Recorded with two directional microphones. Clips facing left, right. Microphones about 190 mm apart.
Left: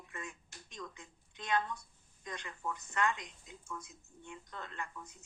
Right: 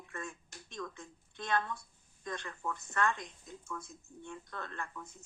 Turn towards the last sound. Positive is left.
turn(degrees=15)  # may be behind; listen again after turning